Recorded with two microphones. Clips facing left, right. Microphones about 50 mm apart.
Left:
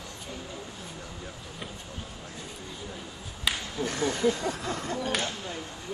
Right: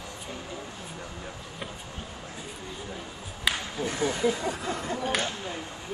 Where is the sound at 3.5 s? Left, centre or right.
Centre.